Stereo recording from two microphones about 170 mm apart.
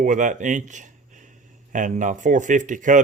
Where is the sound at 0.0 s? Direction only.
50° right (ahead or behind).